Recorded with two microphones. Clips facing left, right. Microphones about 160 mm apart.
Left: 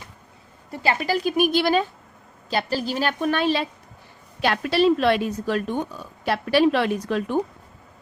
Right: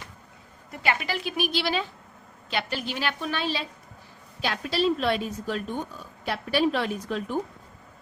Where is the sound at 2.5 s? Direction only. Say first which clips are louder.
Left 6 dB; 35° left (ahead or behind); by 7.4 s 80° left.